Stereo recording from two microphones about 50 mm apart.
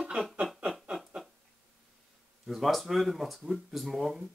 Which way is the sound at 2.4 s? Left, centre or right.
Centre.